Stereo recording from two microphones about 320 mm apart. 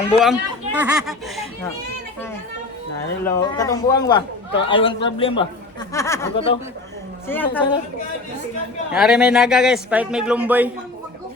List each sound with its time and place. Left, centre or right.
0.2 s speech: centre
3.2 s speech: centre
8.9 s speech: centre